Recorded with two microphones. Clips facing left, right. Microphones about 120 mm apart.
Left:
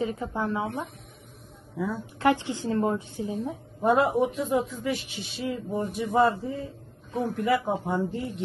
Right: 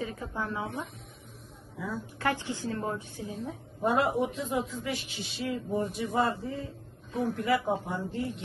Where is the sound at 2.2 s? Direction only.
20° left (ahead or behind).